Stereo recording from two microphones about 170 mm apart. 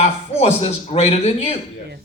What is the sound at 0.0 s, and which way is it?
Speech, 40° left (ahead or behind).